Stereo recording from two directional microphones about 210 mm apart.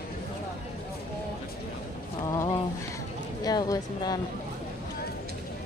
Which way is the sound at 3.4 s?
20° left (ahead or behind).